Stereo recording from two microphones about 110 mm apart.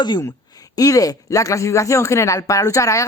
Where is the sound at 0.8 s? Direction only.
30° left (ahead or behind).